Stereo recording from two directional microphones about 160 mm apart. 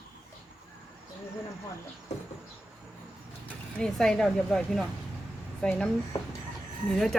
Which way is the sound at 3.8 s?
5° left (ahead or behind).